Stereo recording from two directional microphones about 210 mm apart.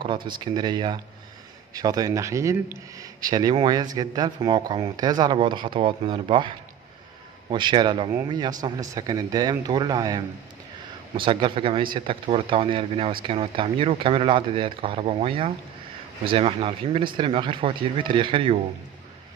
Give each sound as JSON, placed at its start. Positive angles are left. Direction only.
{"t": 0.0, "sound": "speech", "side_deg": -20}